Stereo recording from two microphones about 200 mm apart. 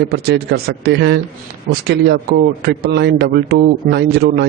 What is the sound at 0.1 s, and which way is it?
A man's voice, 55° right (ahead or behind).